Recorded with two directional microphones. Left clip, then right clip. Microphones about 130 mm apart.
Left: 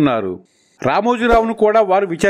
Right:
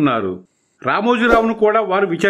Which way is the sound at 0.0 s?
45° left (ahead or behind).